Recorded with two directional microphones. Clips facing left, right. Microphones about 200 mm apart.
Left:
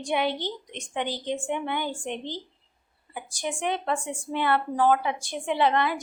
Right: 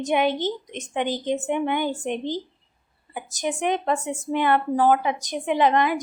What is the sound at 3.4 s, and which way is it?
A woman's voice, 15° right (ahead or behind).